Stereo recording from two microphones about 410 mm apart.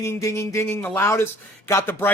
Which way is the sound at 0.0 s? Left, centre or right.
Centre.